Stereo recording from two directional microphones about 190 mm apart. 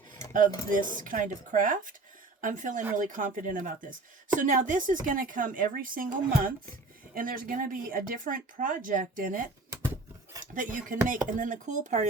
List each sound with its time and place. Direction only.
0.9 s speech: 45° right (ahead or behind)